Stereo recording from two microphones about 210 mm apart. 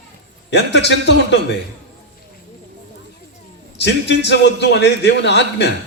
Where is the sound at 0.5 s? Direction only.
55° left (ahead or behind).